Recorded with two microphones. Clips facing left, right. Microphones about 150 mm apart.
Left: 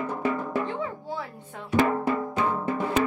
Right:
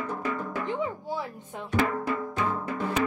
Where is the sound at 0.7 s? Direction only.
15° right (ahead or behind).